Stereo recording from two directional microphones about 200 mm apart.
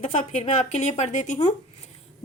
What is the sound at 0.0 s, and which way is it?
A woman's voice, 35° left (ahead or behind).